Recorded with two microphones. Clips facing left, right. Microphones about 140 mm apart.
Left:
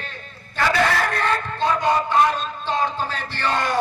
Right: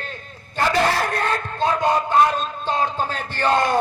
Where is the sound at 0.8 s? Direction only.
35° right (ahead or behind).